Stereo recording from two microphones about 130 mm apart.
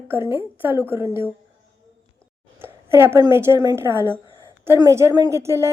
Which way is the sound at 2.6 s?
20° right (ahead or behind).